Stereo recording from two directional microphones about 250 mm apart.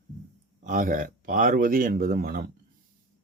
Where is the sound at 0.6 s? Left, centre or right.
Right.